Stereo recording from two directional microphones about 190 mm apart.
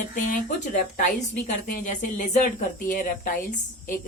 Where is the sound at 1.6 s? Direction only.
40° left (ahead or behind).